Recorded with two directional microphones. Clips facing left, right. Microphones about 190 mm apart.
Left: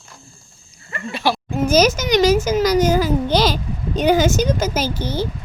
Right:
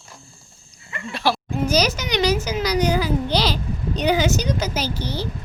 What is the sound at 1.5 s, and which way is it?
A child's voice, 45° left (ahead or behind).